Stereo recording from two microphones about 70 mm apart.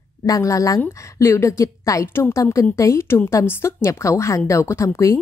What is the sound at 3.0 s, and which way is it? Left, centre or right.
Speech, left.